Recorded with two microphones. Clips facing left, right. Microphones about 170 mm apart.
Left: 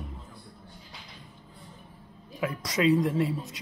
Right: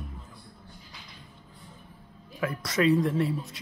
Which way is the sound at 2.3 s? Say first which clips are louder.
Right 1 dB; 15° left (ahead or behind).